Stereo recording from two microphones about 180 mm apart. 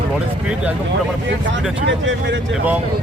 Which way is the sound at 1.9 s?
90° right.